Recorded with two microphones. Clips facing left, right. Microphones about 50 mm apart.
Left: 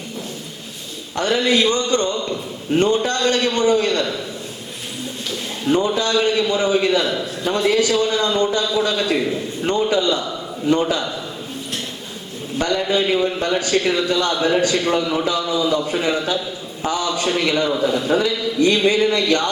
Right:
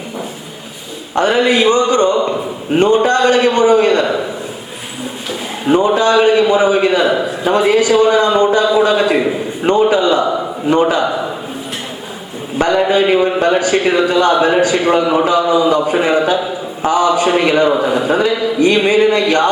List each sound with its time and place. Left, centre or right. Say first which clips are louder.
1.1 s a man's voice: right 6 dB; right
5.3 s a sound: right 5 dB; right
6.0 s a man's voice: right 8 dB; right
12.5 s a man's voice: right 7 dB; right